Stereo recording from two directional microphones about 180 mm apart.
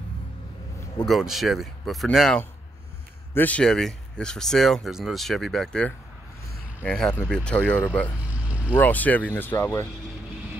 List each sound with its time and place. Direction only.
1.0 s speech: centre (ahead or behind)